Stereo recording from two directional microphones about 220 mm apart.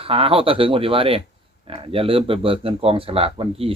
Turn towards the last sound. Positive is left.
turn(degrees=-25)  # may be behind; listen again after turning